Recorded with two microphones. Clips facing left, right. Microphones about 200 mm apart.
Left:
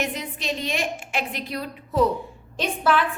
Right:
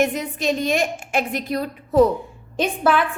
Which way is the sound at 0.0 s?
45° right (ahead or behind).